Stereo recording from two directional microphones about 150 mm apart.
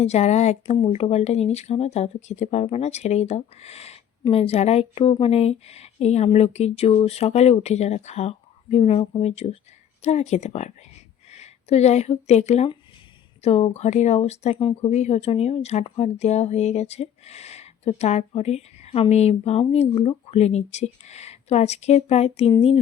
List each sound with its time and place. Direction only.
0.0 s speech: 45° left (ahead or behind)